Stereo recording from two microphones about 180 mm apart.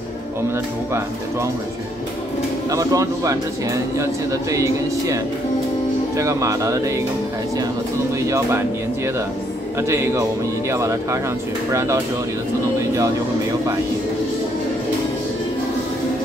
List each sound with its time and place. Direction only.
2.7 s speech: 20° right (ahead or behind)
8.3 s speech: 15° right (ahead or behind)